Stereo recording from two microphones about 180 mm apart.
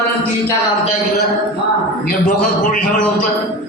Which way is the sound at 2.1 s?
50° left (ahead or behind).